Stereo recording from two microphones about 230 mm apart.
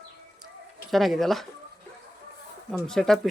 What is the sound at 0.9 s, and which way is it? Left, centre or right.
Speech, centre.